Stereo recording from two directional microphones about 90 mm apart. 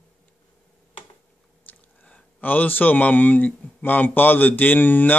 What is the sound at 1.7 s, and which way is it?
Speech, 15° left (ahead or behind).